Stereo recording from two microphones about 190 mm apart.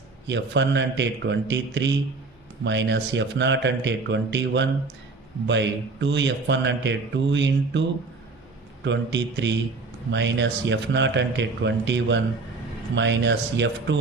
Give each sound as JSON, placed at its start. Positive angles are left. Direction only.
{"t": 0.3, "sound": "speech", "side_deg": -70}